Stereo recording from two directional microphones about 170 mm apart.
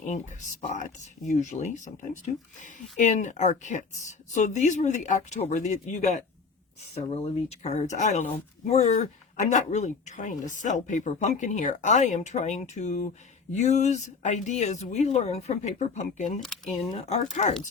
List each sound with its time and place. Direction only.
0.0 s a woman's voice: 45° left (ahead or behind)
16.4 s speech: centre (ahead or behind)